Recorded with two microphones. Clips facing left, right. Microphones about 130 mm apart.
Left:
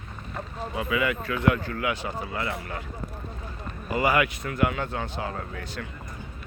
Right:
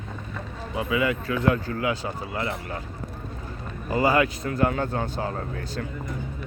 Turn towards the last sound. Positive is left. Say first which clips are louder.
# right 4 dB
turn(degrees=-35)  # may be behind; listen again after turning